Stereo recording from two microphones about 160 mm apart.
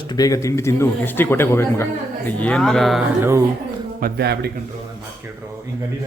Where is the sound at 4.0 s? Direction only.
70° right (ahead or behind); by 4.5 s 90° right.